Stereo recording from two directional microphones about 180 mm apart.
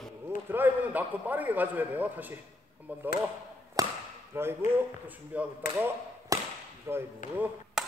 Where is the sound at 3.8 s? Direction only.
20° right (ahead or behind).